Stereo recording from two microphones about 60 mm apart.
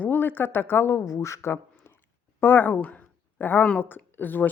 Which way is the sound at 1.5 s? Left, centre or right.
Left.